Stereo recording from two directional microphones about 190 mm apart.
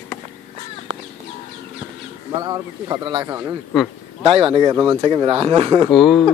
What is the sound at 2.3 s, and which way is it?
Speech, 20° right (ahead or behind).